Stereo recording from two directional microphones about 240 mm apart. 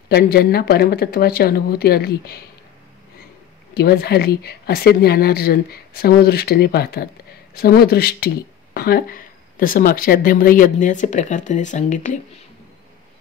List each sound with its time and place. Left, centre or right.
0.1 s speech: left
3.7 s speech: left